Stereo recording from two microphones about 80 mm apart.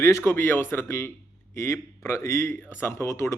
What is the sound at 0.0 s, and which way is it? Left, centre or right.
Speech, left.